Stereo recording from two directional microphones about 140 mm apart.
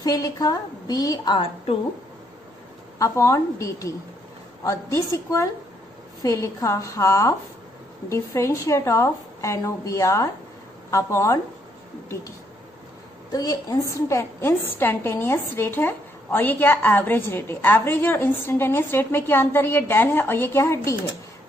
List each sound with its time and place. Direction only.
0.0 s a woman's voice: 25° left (ahead or behind)
3.0 s a woman's voice: 20° left (ahead or behind)
13.3 s a woman's voice: 30° left (ahead or behind)